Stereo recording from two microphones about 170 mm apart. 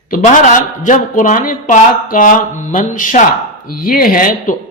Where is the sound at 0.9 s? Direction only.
50° left (ahead or behind).